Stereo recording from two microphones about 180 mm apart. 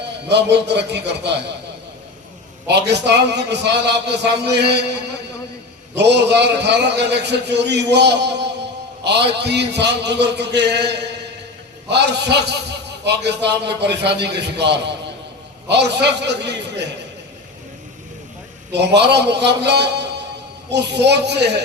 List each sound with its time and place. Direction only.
0.3 s a man's voice: 70° right (ahead or behind)
2.6 s a man's voice: 70° right (ahead or behind)
6.0 s a man's voice: 70° right (ahead or behind)
18.7 s a man's voice: 70° right (ahead or behind)